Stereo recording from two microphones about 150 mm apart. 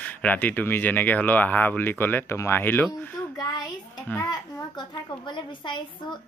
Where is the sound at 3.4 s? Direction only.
30° left (ahead or behind).